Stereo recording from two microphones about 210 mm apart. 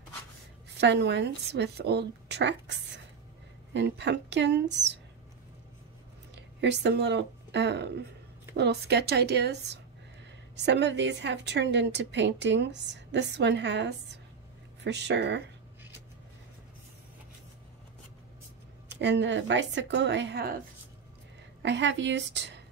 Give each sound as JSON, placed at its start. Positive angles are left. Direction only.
{"t": 0.7, "sound": "a woman's voice", "side_deg": -55}
{"t": 3.7, "sound": "a woman's voice", "side_deg": -55}
{"t": 6.3, "sound": "a woman's voice", "side_deg": -55}
{"t": 18.9, "sound": "a woman's voice", "side_deg": -55}
{"t": 21.6, "sound": "a woman's voice", "side_deg": -60}